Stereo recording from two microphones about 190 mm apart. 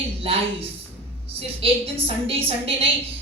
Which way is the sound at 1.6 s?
30° right (ahead or behind).